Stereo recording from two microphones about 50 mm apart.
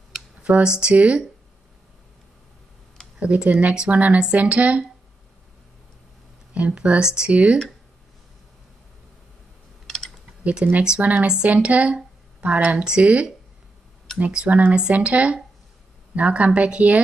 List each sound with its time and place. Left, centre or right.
0.4 s speech: centre
3.2 s speech: right
6.5 s speech: right
9.8 s typing: centre
10.4 s speech: right